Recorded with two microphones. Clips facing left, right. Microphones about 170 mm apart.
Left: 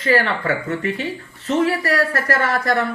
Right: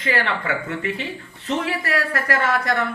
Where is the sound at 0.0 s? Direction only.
40° left (ahead or behind).